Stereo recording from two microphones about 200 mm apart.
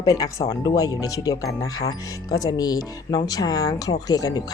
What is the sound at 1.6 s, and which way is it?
Speech, 90° left.